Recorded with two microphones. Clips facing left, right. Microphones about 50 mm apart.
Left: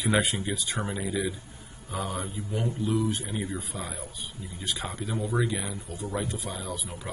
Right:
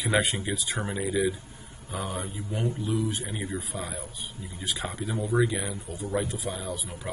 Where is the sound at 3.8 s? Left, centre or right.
Centre.